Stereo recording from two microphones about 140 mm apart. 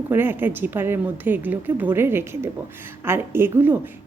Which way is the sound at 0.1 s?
15° right (ahead or behind).